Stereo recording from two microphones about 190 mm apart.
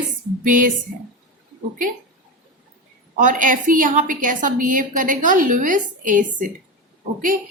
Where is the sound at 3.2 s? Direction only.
40° right (ahead or behind).